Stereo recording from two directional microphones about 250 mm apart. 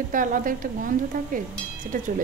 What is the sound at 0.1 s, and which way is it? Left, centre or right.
Speech, right.